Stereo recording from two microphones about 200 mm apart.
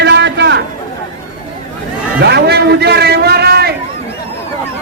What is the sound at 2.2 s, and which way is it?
A man's voice, 55° right (ahead or behind).